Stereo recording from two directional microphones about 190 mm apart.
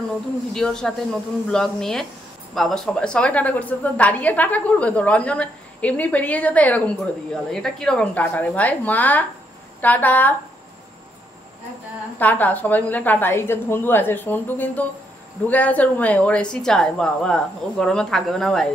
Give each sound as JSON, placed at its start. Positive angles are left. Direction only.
{"t": 0.5, "sound": "a woman's voice", "side_deg": 5}
{"t": 12.2, "sound": "a woman's voice", "side_deg": 10}